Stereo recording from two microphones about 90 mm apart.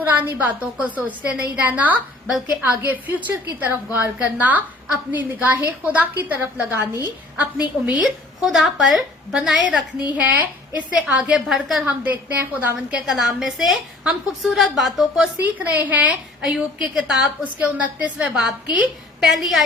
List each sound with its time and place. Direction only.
0.0 s a woman's voice: 20° right (ahead or behind)
8.0 s a woman's voice: centre (ahead or behind)
11.9 s a woman's voice: 15° right (ahead or behind)
13.1 s a woman's voice: 5° right (ahead or behind)
15.5 s a woman's voice: 15° right (ahead or behind)
19.2 s a woman's voice: 5° right (ahead or behind)